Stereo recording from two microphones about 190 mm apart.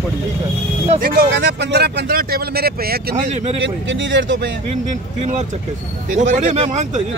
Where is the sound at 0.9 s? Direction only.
50° right (ahead or behind).